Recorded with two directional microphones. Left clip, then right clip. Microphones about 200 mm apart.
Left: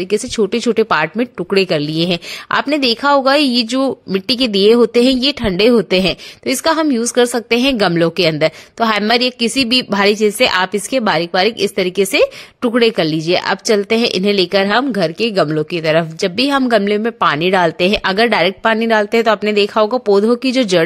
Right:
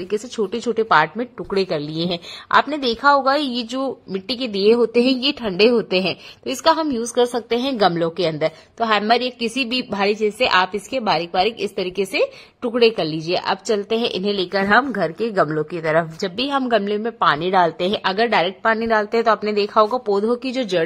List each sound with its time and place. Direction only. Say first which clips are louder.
0.1 s a woman's voice: left 6 dB; 45° left (ahead or behind)
15.3 s a woman's voice: left 4 dB; 65° left (ahead or behind); by 20.8 s 45° left (ahead or behind)